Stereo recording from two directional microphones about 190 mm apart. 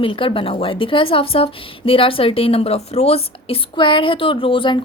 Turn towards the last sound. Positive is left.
turn(degrees=25)  # may be behind; listen again after turning